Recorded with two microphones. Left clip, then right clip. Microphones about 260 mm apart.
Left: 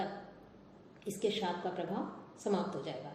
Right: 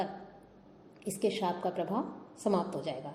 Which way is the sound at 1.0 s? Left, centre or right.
Right.